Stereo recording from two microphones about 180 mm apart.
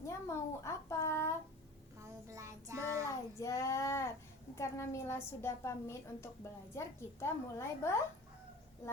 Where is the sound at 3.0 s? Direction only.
15° left (ahead or behind).